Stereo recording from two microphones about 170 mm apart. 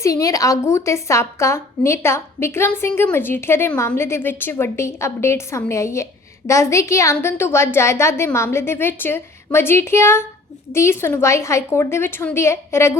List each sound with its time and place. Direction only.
0.0 s a woman's voice: 20° left (ahead or behind)